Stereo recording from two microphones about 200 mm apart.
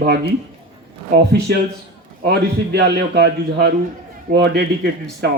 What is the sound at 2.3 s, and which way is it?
Speech, 55° right (ahead or behind).